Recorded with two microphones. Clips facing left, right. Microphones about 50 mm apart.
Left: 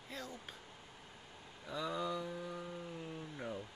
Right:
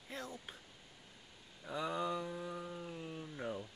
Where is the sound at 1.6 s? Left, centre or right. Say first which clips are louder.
Right 1 dB; centre.